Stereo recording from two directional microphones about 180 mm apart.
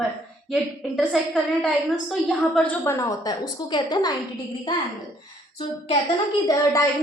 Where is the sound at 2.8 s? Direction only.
15° left (ahead or behind).